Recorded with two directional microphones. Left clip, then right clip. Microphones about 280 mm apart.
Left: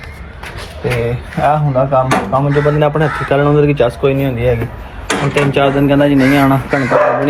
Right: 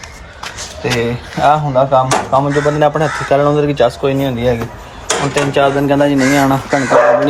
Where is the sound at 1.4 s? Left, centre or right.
Right.